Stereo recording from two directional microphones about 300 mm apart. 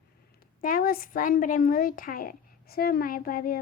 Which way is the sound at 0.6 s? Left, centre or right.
Left.